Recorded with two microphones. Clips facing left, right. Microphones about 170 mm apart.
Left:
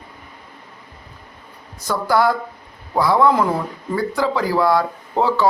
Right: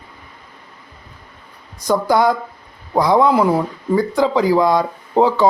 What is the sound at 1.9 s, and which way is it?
Speech, 20° right (ahead or behind).